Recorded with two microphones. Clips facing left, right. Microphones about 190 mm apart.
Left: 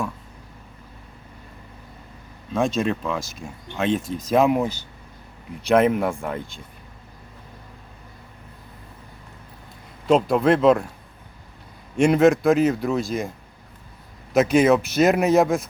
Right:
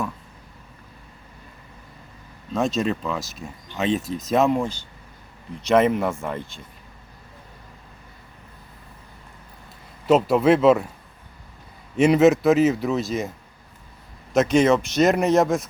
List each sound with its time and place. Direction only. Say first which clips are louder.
2.5 s speech: left 1 dB; centre (ahead or behind)
10.1 s speech: right 1 dB; 5° right (ahead or behind)
11.9 s speech: right 1 dB; 5° right (ahead or behind)
14.3 s speech: left 1 dB; 5° left (ahead or behind)